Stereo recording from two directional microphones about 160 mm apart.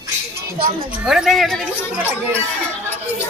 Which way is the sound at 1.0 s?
Centre (ahead or behind).